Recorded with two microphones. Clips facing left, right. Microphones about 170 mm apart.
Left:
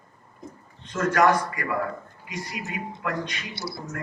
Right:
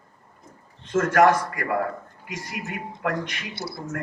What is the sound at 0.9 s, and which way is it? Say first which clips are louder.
A man's voice: right 3 dB; 50° right (ahead or behind).